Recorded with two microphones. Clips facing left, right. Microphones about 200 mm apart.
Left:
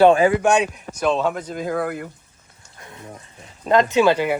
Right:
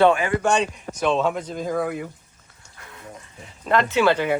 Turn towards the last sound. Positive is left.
turn(degrees=10)  # may be behind; listen again after turning